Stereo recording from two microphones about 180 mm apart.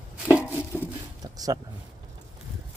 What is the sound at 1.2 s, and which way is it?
Speech, 20° right (ahead or behind).